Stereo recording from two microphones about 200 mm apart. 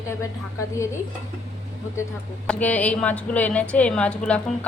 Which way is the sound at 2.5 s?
5° left (ahead or behind).